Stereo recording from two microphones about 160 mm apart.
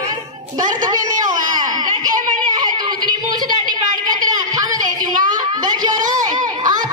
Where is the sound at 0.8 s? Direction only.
25° right (ahead or behind).